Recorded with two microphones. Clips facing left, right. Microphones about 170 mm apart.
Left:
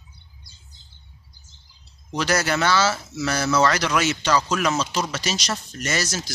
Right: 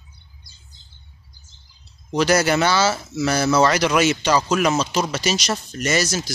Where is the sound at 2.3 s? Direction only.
20° right (ahead or behind).